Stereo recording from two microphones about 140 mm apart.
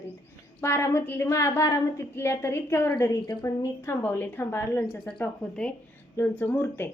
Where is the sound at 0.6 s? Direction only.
20° left (ahead or behind).